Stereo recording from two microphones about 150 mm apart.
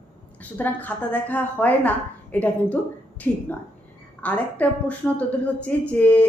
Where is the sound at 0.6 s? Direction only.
10° left (ahead or behind).